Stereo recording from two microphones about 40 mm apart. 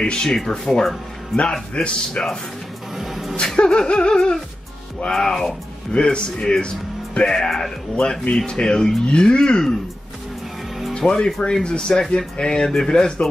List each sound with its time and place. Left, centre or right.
0.0 s a man's voice: left; by 1.5 s centre
1.8 s speech: left
3.0 s a sound: centre
3.3 s speech: centre
7.4 s speech: centre
7.9 s speech: centre
10.9 s speech: left